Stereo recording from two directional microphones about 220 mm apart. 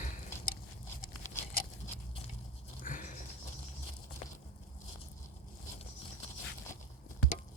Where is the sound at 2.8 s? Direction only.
35° left (ahead or behind).